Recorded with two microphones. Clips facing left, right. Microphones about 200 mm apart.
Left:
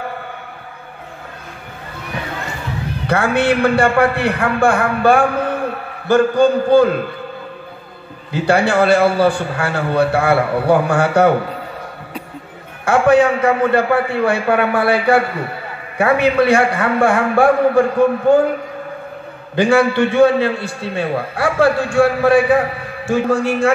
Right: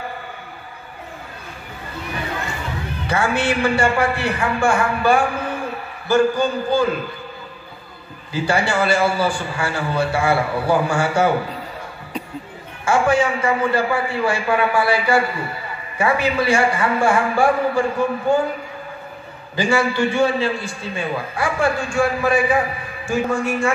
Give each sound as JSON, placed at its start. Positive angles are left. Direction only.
{"t": 3.1, "sound": "a man's voice", "side_deg": 60}
{"t": 8.3, "sound": "a man's voice", "side_deg": 60}
{"t": 12.8, "sound": "a man's voice", "side_deg": 60}
{"t": 19.5, "sound": "a man's voice", "side_deg": 60}